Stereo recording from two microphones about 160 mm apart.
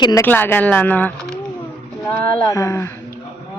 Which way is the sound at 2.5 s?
20° left (ahead or behind).